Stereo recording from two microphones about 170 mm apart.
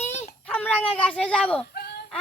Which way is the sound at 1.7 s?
70° left (ahead or behind).